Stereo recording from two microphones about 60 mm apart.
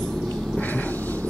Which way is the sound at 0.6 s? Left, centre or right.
Left.